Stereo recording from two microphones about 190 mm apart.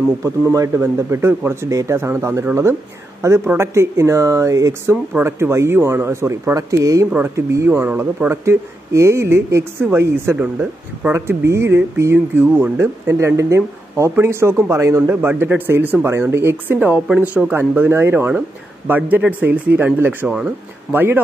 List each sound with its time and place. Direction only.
0.2 s speech: 15° right (ahead or behind)